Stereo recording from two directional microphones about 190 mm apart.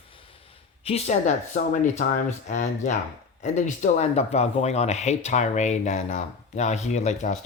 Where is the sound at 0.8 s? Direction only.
35° left (ahead or behind).